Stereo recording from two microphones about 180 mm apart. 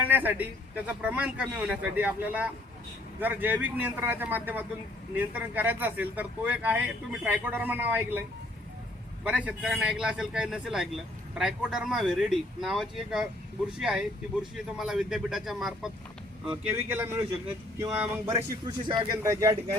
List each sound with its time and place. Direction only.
0.0 s a man's voice: 10° right (ahead or behind)
9.2 s a man's voice: 5° right (ahead or behind)
18.3 s speech: 25° right (ahead or behind)